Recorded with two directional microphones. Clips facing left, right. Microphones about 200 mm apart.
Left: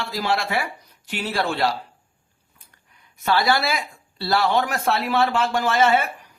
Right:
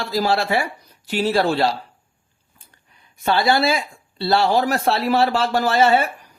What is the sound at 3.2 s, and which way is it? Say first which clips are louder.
Speech: right 3 dB; 25° right (ahead or behind).